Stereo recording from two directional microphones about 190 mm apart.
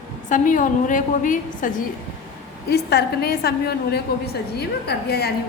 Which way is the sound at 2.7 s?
55° left (ahead or behind).